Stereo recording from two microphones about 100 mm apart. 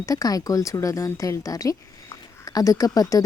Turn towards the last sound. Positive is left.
turn(degrees=35)  # may be behind; listen again after turning